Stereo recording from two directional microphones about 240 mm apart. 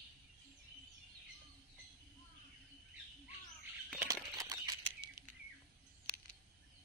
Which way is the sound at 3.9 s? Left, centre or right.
Centre.